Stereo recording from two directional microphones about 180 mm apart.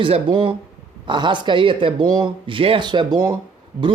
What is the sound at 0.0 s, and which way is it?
Speech, 25° right (ahead or behind).